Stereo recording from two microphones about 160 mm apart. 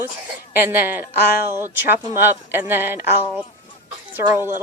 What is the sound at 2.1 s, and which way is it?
Speech, 15° right (ahead or behind).